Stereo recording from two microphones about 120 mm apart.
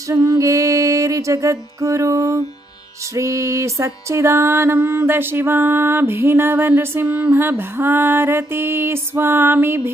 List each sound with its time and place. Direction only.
0.1 s music: 25° right (ahead or behind)